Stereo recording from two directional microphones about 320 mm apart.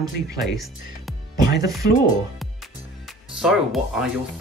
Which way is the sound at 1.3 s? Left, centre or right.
Left.